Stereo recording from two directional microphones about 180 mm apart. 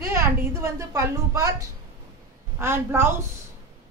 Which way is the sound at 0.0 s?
15° right (ahead or behind).